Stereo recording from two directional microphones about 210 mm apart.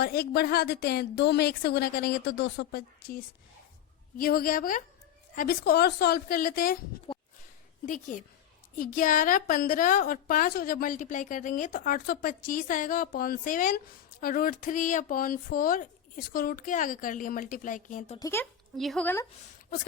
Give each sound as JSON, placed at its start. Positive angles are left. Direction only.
{"t": 0.0, "sound": "a woman's voice", "side_deg": 50}
{"t": 4.2, "sound": "a woman's voice", "side_deg": 45}
{"t": 7.9, "sound": "a woman's voice", "side_deg": 40}
{"t": 18.2, "sound": "speech", "side_deg": 10}